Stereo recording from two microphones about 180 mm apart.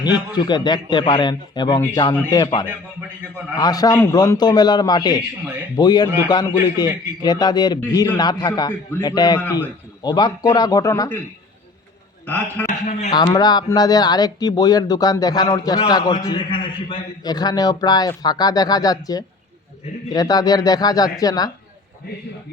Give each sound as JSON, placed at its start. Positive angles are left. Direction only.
{"t": 0.0, "sound": "speech", "side_deg": 25}
{"t": 12.2, "sound": "a man's voice", "side_deg": 10}
{"t": 12.8, "sound": "a man's voice", "side_deg": 40}
{"t": 13.1, "sound": "speech", "side_deg": 20}